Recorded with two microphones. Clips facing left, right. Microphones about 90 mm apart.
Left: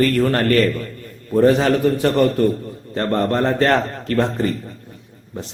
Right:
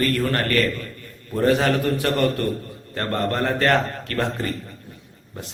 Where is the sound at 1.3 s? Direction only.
20° left (ahead or behind).